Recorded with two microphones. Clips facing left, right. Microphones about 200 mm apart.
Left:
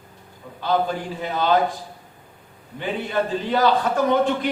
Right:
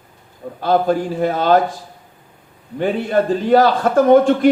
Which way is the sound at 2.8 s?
50° right (ahead or behind).